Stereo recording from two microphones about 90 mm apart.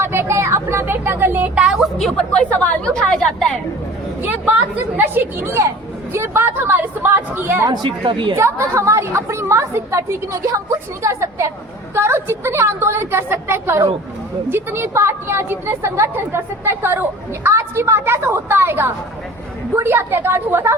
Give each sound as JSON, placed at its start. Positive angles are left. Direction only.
{"t": 0.0, "sound": "speech", "side_deg": -25}
{"t": 1.5, "sound": "a woman's voice", "side_deg": -10}
{"t": 2.0, "sound": "a woman's voice", "side_deg": 10}
{"t": 4.2, "sound": "a woman's voice", "side_deg": -20}
{"t": 7.7, "sound": "speech", "side_deg": -60}
{"t": 8.4, "sound": "a woman's voice", "side_deg": -30}